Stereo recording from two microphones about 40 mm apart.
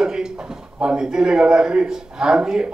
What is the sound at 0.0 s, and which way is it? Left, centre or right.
Drawer open or close, centre.